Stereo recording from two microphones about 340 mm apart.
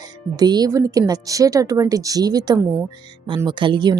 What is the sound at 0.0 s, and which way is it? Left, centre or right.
Speech, centre.